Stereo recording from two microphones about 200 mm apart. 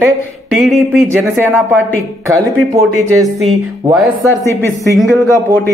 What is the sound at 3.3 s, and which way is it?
Speech, centre (ahead or behind).